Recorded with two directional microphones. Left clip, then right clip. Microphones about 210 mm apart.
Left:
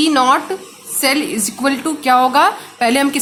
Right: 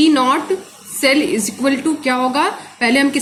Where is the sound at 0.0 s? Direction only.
35° left (ahead or behind).